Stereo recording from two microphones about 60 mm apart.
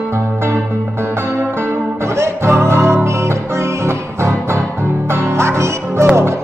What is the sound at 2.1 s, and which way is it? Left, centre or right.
Music, right.